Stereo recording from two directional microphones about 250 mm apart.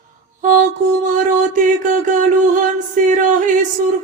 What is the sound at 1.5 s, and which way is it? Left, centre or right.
Music, right.